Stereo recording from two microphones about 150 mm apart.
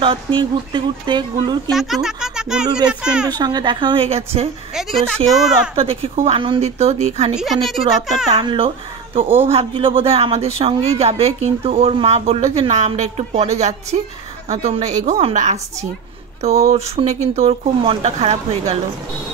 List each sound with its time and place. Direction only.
0.0 s a woman's voice: 35° right (ahead or behind)
1.7 s speech: centre (ahead or behind)
3.3 s a woman's voice: 30° right (ahead or behind)
4.7 s a child's voice: centre (ahead or behind)
5.8 s a woman's voice: 40° right (ahead or behind)
7.3 s speech: centre (ahead or behind)
8.4 s a woman's voice: 35° right (ahead or behind); by 15.9 s 50° right (ahead or behind)
16.4 s speech: 20° right (ahead or behind)
16.7 s speech: 45° right (ahead or behind)